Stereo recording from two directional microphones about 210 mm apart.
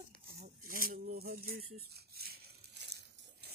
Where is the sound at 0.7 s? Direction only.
45° right (ahead or behind).